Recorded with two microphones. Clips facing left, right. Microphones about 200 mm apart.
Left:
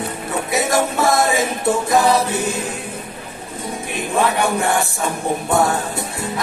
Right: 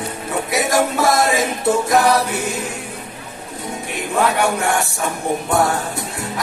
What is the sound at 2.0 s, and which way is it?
Music, 20° left (ahead or behind).